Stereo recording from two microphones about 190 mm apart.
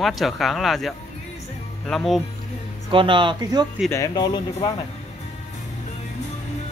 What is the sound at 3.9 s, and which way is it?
Speech, 20° left (ahead or behind).